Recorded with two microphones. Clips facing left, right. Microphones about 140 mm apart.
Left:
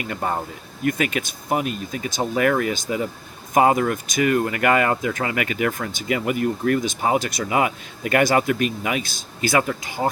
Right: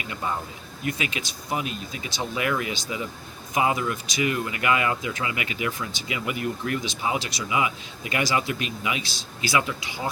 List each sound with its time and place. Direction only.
0.0 s speech: 50° left (ahead or behind)